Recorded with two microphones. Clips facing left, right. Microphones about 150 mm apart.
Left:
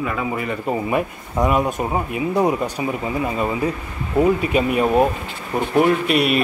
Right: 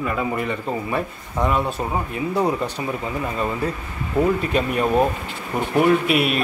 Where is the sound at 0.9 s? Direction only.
10° left (ahead or behind).